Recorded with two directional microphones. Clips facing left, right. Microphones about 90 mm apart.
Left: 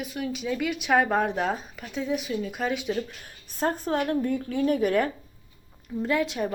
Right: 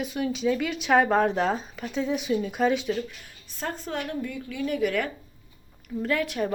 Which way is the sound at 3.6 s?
45° left (ahead or behind).